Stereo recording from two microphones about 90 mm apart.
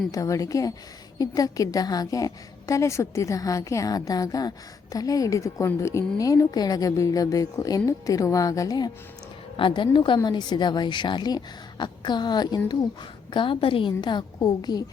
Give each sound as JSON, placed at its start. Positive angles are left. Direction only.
{"t": 0.1, "sound": "a woman's voice", "side_deg": 40}
{"t": 9.6, "sound": "a woman's voice", "side_deg": 65}
{"t": 10.2, "sound": "a woman's voice", "side_deg": 55}
{"t": 13.3, "sound": "a woman's voice", "side_deg": 70}
{"t": 14.0, "sound": "a woman's voice", "side_deg": 50}